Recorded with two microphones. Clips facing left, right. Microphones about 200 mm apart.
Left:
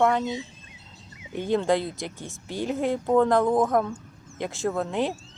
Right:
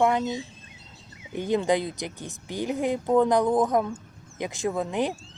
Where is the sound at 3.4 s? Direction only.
Centre (ahead or behind).